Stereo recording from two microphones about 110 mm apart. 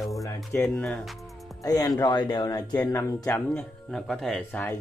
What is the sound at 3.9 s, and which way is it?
Music, 5° left (ahead or behind).